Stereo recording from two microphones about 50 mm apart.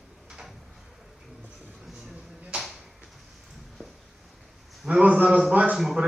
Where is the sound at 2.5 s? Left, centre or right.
Right.